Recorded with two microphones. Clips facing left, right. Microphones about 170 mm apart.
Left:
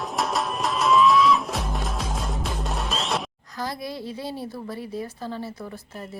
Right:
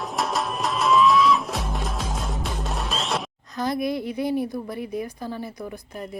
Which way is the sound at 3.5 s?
20° right (ahead or behind).